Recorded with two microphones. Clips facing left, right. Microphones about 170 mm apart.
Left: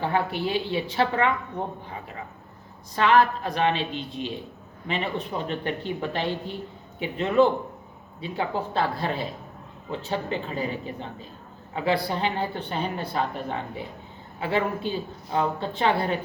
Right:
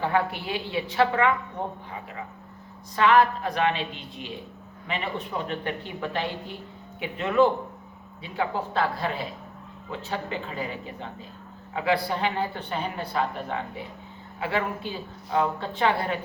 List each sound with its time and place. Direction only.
0.0 s a woman's voice: 30° left (ahead or behind)
2.9 s a woman's voice: 30° left (ahead or behind)
5.5 s a woman's voice: 30° left (ahead or behind)